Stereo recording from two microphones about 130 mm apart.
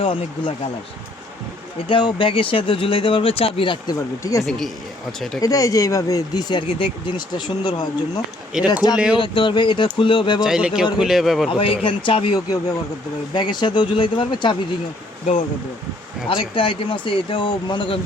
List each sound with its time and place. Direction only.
0.0 s speech: 45° left (ahead or behind)
1.9 s speech: 40° left (ahead or behind)
3.8 s speech: 25° left (ahead or behind)
4.4 s speech: 5° left (ahead or behind)
5.4 s speech: 25° left (ahead or behind)
8.5 s speech: 5° right (ahead or behind)
9.1 s speech: 40° left (ahead or behind)
10.4 s speech: 5° right (ahead or behind)
11.4 s speech: 45° left (ahead or behind)
16.3 s speech: 40° left (ahead or behind)